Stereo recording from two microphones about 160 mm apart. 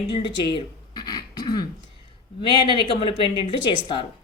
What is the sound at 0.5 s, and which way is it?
Throat clearing, 25° left (ahead or behind).